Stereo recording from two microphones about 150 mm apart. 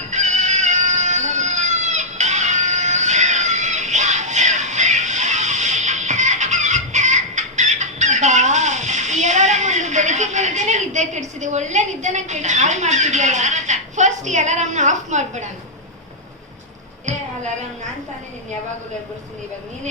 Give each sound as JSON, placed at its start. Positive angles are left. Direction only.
{"t": 0.1, "sound": "cat", "side_deg": -50}